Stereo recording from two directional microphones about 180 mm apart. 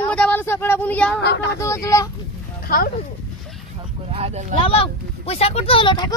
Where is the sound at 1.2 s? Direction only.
75° left (ahead or behind).